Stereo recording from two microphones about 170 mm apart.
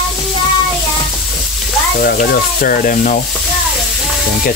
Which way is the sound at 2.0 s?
60° left (ahead or behind).